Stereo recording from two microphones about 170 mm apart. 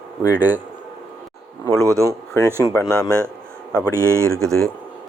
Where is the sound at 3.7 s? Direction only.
15° right (ahead or behind).